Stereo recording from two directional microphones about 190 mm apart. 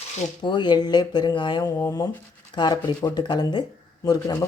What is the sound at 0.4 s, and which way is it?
Speech, 25° left (ahead or behind).